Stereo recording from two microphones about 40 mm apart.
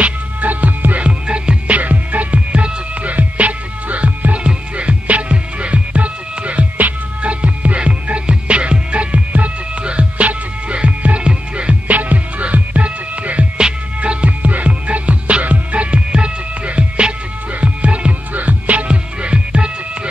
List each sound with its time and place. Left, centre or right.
0.0 s music: right
1.2 s music: right
1.8 s music: right
11.9 s music: right
13.6 s music: right
14.2 s music: right